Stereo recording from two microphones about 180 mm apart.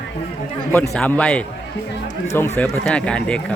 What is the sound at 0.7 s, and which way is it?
Speech, 10° left (ahead or behind).